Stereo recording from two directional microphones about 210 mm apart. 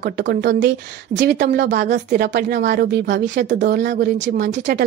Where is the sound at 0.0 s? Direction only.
50° right (ahead or behind).